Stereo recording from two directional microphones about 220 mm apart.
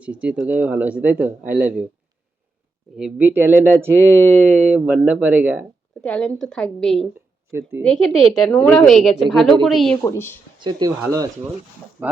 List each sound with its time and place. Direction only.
0.0 s speech: 5° right (ahead or behind)
3.0 s speech: 10° right (ahead or behind)
6.0 s speech: 5° left (ahead or behind)
7.5 s speech: 10° right (ahead or behind)
7.9 s speech: centre (ahead or behind)
10.0 s speech: 10° left (ahead or behind)
10.6 s speech: 20° right (ahead or behind)
12.0 s speech: 5° right (ahead or behind)